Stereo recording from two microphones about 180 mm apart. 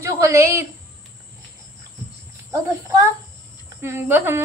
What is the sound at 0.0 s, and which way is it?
Speech, 15° right (ahead or behind).